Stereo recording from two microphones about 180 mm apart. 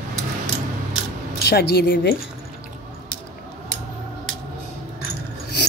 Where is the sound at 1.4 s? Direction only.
65° left (ahead or behind).